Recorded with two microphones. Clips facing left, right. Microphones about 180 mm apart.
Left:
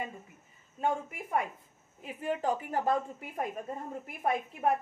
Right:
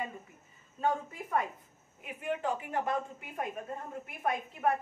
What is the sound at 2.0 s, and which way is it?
Speech, 35° left (ahead or behind).